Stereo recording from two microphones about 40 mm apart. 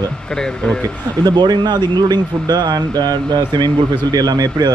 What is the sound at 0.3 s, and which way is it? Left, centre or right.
Speech, centre.